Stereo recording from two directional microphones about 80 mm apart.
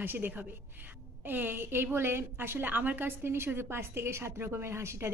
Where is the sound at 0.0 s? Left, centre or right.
Right.